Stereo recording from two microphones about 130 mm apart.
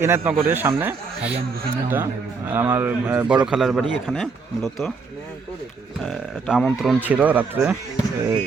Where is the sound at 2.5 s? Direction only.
15° right (ahead or behind); by 4.8 s centre (ahead or behind).